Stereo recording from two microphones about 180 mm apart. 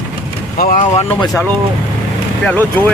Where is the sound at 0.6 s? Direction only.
45° left (ahead or behind).